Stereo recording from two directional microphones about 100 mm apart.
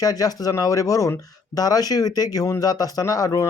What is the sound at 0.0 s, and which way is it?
Speech, 40° left (ahead or behind).